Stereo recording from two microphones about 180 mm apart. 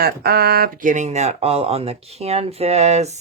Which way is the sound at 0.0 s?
60° right (ahead or behind).